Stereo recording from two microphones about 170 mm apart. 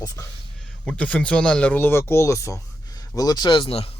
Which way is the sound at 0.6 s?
5° left (ahead or behind).